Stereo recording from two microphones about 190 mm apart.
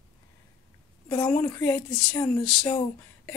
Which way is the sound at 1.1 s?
15° left (ahead or behind).